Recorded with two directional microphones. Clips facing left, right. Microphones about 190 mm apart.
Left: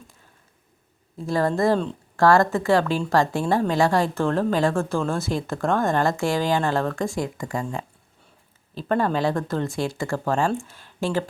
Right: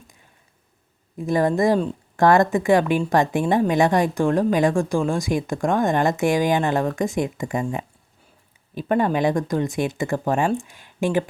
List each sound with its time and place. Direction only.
1.2 s a woman's voice: 20° right (ahead or behind)